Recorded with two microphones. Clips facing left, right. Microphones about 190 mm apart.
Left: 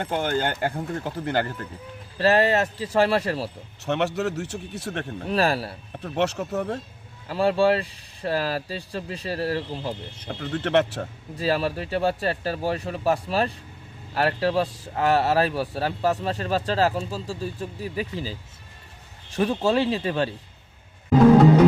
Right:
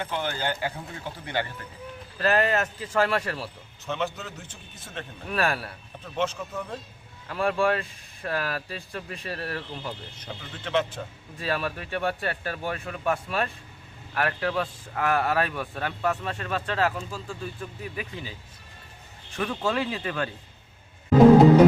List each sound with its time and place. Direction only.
0.0 s speech: 50° left (ahead or behind)
2.1 s speech: 30° left (ahead or behind)
3.8 s a man's voice: 70° left (ahead or behind)
5.2 s speech: 30° left (ahead or behind)
6.1 s a man's voice: 70° left (ahead or behind)
7.3 s speech: 30° left (ahead or behind)
10.2 s speech: 60° left (ahead or behind)
11.3 s speech: 30° left (ahead or behind)
19.4 s speech: 30° left (ahead or behind)